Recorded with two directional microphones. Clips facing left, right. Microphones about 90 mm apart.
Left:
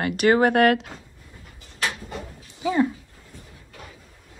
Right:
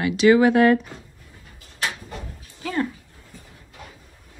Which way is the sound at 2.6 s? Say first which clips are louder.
Left 4 dB; 15° left (ahead or behind).